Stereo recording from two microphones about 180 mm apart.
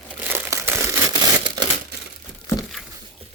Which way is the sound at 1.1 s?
25° right (ahead or behind).